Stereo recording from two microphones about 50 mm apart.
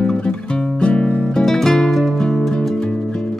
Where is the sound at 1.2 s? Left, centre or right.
Centre.